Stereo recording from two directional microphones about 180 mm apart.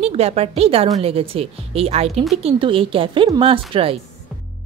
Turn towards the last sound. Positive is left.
turn(degrees=-30)  # may be behind; listen again after turning